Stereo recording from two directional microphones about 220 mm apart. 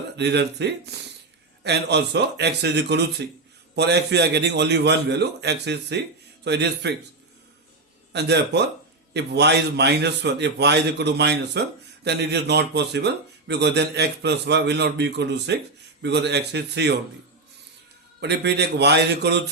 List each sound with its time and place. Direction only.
0.2 s a man's voice: 50° right (ahead or behind)
8.1 s a man's voice: 50° right (ahead or behind)
18.2 s a man's voice: 50° right (ahead or behind)